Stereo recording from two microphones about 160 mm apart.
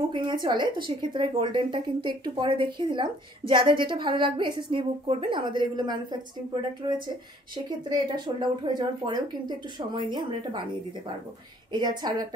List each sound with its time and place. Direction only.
0.1 s a woman's voice: 30° right (ahead or behind)
11.7 s a woman's voice: 25° right (ahead or behind)